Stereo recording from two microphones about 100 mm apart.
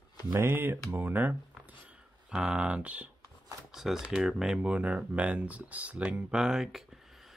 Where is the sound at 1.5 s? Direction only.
10° right (ahead or behind).